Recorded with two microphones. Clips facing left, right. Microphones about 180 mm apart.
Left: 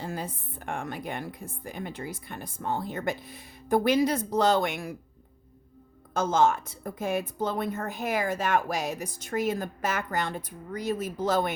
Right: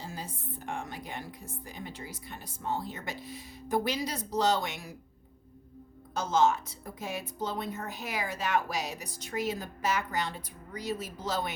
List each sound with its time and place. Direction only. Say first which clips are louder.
0.0 s speech: left 6 dB; 60° left (ahead or behind)
6.1 s a woman's voice: left 3 dB; 50° left (ahead or behind)